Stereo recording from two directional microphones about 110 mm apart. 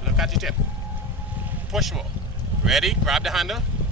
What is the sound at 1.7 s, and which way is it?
Speech, 5° right (ahead or behind).